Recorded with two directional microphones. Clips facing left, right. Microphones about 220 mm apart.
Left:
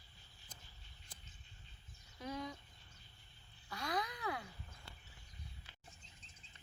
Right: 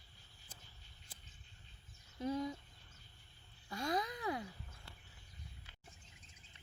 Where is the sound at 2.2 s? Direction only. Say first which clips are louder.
Right 6 dB; 25° right (ahead or behind).